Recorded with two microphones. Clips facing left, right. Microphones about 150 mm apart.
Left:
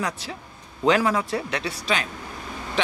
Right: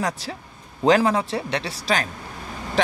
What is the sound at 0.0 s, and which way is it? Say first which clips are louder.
A man's voice: right 2 dB; 35° right (ahead or behind).